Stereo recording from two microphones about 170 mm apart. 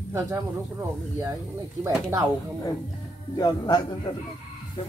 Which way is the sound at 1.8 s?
20° right (ahead or behind).